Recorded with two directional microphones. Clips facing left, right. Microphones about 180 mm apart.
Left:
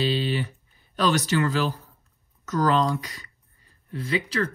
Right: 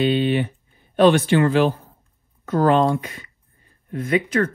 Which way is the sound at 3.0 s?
35° left (ahead or behind).